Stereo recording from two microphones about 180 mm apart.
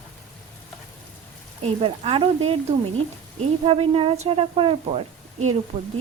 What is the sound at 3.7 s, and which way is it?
Speech, 35° right (ahead or behind).